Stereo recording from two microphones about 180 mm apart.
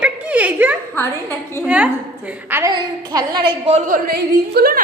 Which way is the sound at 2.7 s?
25° right (ahead or behind).